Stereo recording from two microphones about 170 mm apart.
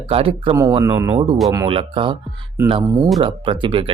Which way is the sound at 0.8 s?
20° right (ahead or behind).